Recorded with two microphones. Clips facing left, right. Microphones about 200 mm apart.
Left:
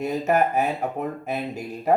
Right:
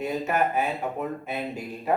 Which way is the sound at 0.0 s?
40° left (ahead or behind).